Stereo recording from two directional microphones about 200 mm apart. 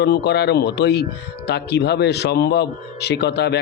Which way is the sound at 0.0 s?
55° left (ahead or behind).